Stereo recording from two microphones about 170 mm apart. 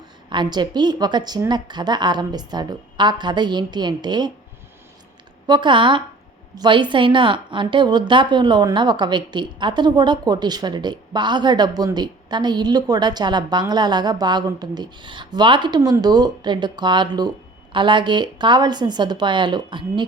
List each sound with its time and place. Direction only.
0.3 s a woman's voice: 25° right (ahead or behind)
5.5 s a woman's voice: 25° right (ahead or behind)